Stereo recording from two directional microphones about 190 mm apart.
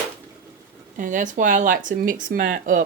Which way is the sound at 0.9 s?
45° right (ahead or behind).